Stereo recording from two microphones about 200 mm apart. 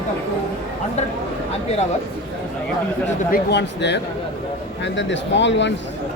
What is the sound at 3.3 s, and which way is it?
Speech, 60° left (ahead or behind).